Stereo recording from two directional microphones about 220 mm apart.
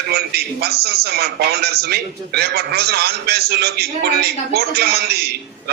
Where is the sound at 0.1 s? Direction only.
45° right (ahead or behind).